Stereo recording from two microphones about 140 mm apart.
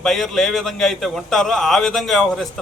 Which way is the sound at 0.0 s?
Centre (ahead or behind).